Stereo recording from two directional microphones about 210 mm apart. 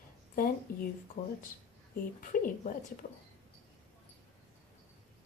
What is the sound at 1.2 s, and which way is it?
A woman's voice, 30° left (ahead or behind).